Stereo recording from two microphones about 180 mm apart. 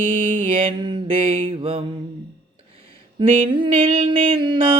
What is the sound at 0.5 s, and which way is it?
Mantra, 30° right (ahead or behind).